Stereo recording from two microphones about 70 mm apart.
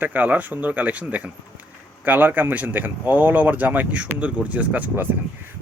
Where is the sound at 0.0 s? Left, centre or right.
Right.